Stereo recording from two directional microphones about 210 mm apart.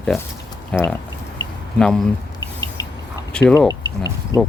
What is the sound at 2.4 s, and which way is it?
Rodents, 20° left (ahead or behind).